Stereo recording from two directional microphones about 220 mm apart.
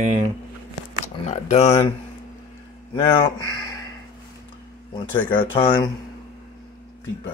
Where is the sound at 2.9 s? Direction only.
20° left (ahead or behind).